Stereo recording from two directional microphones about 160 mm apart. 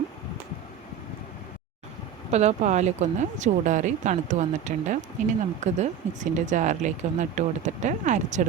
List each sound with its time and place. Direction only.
2.3 s speech: 45° right (ahead or behind)